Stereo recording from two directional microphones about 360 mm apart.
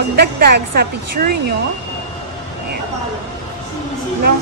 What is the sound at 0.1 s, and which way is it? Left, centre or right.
A woman's voice, right.